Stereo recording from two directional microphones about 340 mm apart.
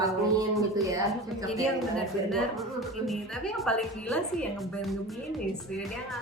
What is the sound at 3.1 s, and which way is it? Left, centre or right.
A woman's voice, centre.